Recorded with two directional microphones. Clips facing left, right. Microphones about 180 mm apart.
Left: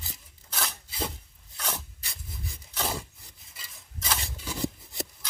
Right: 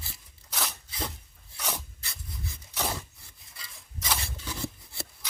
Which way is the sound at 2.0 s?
15° left (ahead or behind).